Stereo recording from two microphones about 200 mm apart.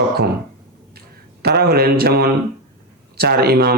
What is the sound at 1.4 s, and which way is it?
Speech, 50° right (ahead or behind).